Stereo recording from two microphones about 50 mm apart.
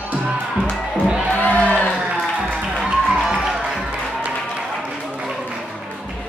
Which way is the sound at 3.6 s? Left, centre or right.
Right.